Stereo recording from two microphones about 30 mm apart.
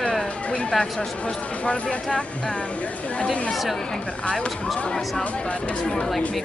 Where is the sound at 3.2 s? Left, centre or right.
Left.